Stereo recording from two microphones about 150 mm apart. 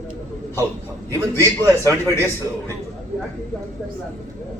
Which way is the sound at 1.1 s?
20° right (ahead or behind).